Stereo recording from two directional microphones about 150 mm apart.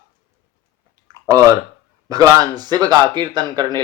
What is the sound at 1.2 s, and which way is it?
Speech, 25° right (ahead or behind).